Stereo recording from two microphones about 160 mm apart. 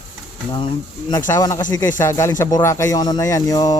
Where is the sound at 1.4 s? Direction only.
25° left (ahead or behind).